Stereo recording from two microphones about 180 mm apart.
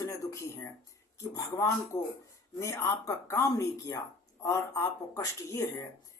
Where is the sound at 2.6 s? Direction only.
15° left (ahead or behind).